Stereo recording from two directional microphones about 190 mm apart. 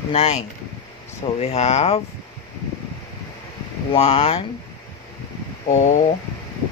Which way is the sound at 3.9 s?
30° left (ahead or behind).